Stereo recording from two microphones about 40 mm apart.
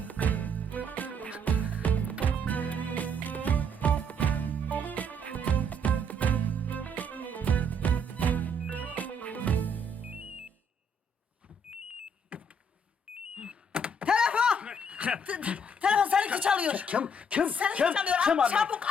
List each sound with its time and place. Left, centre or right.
0.0 s music: left
10.0 s music: right
12.3 s power windows: right
13.3 s a sound: right
14.3 s chuckle: right
16.6 s speech: right